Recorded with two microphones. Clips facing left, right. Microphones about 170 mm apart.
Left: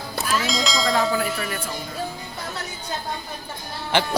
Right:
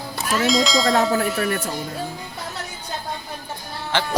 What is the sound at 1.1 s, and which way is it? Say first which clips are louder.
Tubular bells: right 4 dB; 50° right (ahead or behind).